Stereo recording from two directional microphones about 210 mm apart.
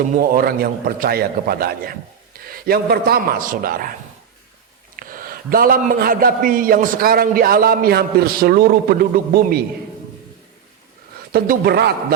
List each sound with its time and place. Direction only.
0.1 s a man's voice: 40° right (ahead or behind)
4.9 s a man's voice: 45° right (ahead or behind)
11.3 s a man's voice: 45° right (ahead or behind)